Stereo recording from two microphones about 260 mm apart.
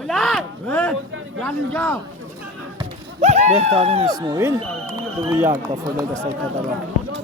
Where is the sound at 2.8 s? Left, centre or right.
Right.